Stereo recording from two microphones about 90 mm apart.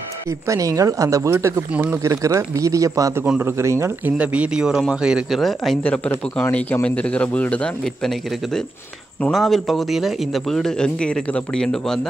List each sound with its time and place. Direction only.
0.5 s speech: 40° right (ahead or behind)
4.0 s speech: 15° right (ahead or behind)
5.4 s a man's voice: centre (ahead or behind)
5.8 s a man's voice: 15° left (ahead or behind)